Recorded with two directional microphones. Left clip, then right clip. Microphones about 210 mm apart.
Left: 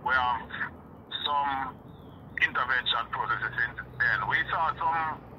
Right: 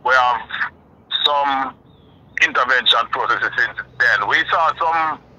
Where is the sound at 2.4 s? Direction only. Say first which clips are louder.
Right 11 dB; 55° right (ahead or behind).